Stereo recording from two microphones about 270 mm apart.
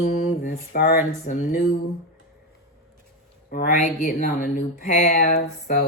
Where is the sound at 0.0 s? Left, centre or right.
Left.